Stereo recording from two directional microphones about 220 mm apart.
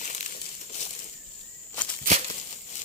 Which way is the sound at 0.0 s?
35° left (ahead or behind).